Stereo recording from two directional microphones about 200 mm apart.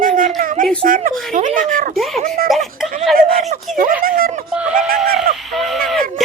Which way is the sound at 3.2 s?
40° right (ahead or behind).